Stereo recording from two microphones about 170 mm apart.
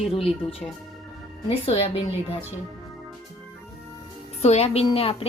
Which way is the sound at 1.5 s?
35° left (ahead or behind).